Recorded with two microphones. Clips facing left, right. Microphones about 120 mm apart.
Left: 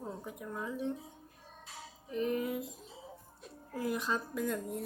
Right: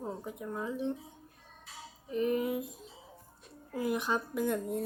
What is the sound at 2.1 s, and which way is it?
Speech, 20° right (ahead or behind).